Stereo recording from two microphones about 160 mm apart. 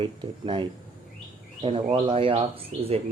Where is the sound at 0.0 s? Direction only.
30° right (ahead or behind).